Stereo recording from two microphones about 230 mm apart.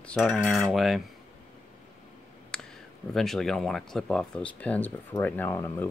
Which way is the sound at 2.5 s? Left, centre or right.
Centre.